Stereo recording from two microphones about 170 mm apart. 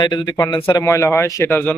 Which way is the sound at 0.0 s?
25° left (ahead or behind).